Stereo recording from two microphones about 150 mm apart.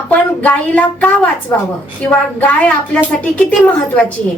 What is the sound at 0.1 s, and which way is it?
Speech, 10° left (ahead or behind).